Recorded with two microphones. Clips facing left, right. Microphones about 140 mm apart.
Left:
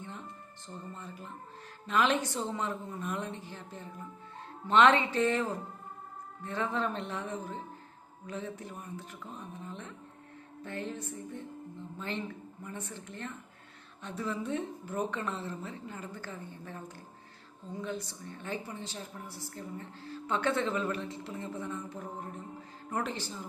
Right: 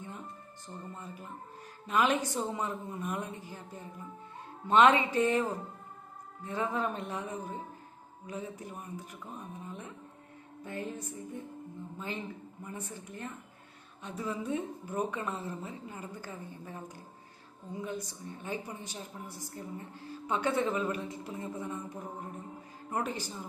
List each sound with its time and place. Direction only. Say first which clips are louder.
0.9 s a woman's voice: even; 10° right (ahead or behind)
18.0 s a woman's voice: right 1 dB; 15° right (ahead or behind)